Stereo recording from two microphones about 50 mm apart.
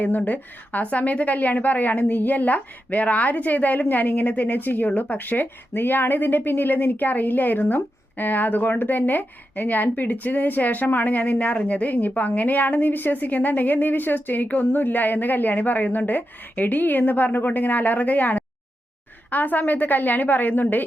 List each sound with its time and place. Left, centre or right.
0.3 s speech: left